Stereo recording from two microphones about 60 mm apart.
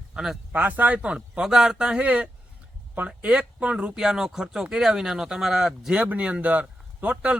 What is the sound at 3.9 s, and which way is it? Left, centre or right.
Speech, centre.